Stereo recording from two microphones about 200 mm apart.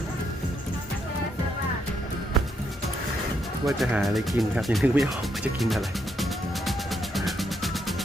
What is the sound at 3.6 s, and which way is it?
Music, centre (ahead or behind).